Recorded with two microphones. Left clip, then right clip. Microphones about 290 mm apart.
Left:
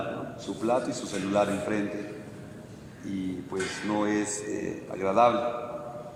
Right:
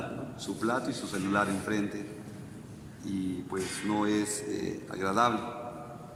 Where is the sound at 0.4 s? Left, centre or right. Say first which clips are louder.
Left 4 dB; centre.